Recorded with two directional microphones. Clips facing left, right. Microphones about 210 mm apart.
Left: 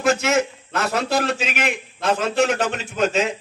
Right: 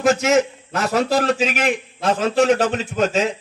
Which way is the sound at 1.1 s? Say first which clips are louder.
Right 4 dB; 40° right (ahead or behind).